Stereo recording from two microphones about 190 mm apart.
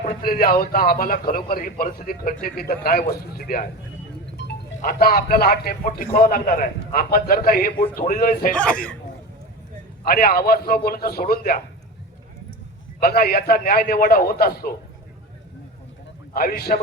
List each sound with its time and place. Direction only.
0.0 s speech: 50° left (ahead or behind)
8.5 s speech: 5° left (ahead or behind)
10.1 s speech: 50° left (ahead or behind)
13.0 s speech: 55° left (ahead or behind)
16.3 s speech: 50° left (ahead or behind)